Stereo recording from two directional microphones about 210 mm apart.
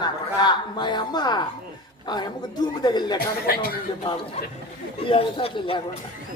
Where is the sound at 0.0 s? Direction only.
20° left (ahead or behind).